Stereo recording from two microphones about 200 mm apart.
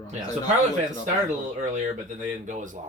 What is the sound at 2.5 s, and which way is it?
Speech, 40° right (ahead or behind).